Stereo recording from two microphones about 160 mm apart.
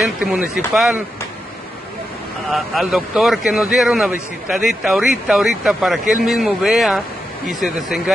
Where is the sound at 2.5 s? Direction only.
Centre (ahead or behind).